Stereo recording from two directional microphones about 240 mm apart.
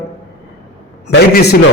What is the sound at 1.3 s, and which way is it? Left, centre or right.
Speech, left.